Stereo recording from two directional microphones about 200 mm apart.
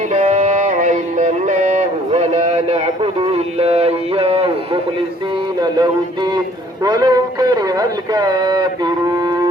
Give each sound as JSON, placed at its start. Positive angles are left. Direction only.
{"t": 0.1, "sound": "music", "side_deg": -35}
{"t": 6.8, "sound": "a man's voice", "side_deg": -20}